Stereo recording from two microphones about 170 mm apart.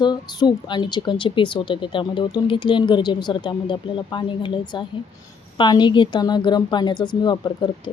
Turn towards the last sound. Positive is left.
turn(degrees=25)  # may be behind; listen again after turning